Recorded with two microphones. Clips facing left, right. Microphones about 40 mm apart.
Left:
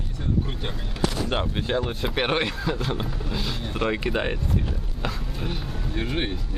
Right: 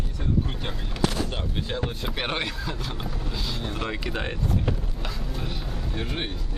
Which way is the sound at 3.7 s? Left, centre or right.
Centre.